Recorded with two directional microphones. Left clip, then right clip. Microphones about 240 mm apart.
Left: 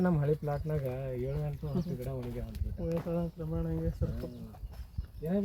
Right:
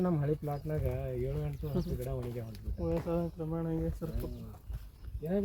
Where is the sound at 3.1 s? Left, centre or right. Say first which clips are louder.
Right 1 dB; right.